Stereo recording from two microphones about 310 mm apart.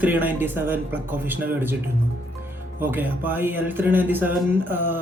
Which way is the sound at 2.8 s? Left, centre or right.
Centre.